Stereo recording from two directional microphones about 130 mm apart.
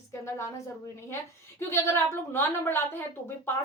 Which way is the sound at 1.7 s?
20° left (ahead or behind).